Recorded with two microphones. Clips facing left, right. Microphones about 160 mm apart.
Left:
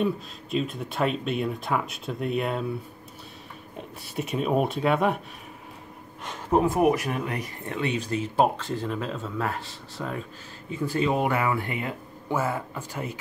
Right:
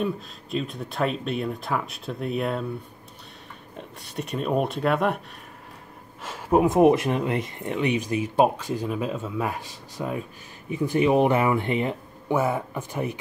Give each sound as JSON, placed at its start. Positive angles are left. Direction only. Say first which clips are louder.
{"t": 0.0, "sound": "speech", "louder": "left 1 dB", "side_deg": 0}
{"t": 4.0, "sound": "speech", "louder": "left 1 dB", "side_deg": 0}
{"t": 6.2, "sound": "speech", "louder": "right 2 dB", "side_deg": -5}
{"t": 6.6, "sound": "speech", "louder": "right 6 dB", "side_deg": -20}